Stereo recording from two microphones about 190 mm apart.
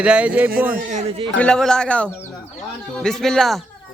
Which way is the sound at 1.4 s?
5° left (ahead or behind).